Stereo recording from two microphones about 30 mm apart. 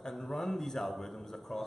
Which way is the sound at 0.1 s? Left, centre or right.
Centre.